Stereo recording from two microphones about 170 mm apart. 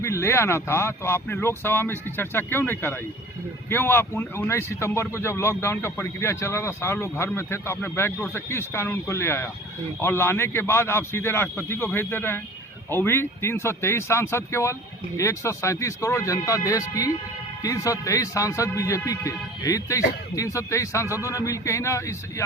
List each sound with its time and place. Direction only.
0.0 s a man's voice: 15° left (ahead or behind)